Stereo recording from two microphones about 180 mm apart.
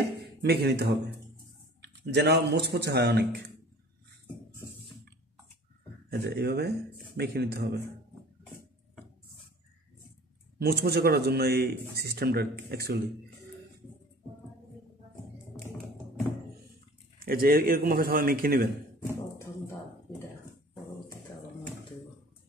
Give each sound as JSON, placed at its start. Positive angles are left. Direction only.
{"t": 0.4, "sound": "speech", "side_deg": -65}
{"t": 6.0, "sound": "speech", "side_deg": -65}
{"t": 10.6, "sound": "speech", "side_deg": -60}
{"t": 17.2, "sound": "a man's voice", "side_deg": -55}
{"t": 19.0, "sound": "a sound", "side_deg": 15}